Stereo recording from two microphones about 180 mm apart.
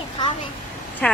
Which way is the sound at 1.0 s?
5° left (ahead or behind).